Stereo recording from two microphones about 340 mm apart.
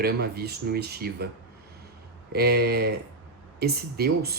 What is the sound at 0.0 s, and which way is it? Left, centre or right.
Speech, right.